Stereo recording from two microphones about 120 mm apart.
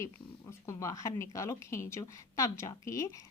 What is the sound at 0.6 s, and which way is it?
A woman's voice, 25° left (ahead or behind).